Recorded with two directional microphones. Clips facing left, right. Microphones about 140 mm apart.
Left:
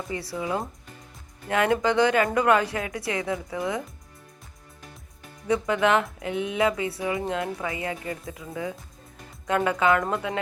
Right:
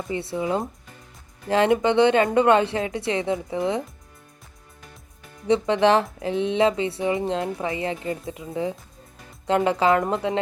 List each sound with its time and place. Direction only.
0.1 s speech: 25° right (ahead or behind)
5.5 s speech: 30° right (ahead or behind)